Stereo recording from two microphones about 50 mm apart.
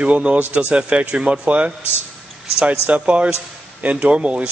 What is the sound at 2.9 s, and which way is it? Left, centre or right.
A man's voice, right.